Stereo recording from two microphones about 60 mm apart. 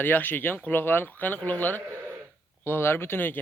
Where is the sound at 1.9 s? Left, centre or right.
Right.